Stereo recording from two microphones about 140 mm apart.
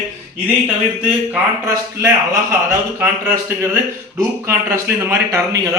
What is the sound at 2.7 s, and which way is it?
Speech, 15° right (ahead or behind).